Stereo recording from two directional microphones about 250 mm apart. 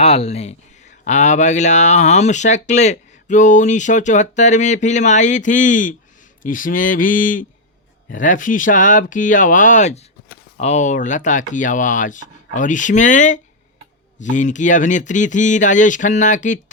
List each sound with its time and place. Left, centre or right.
0.0 s speech: left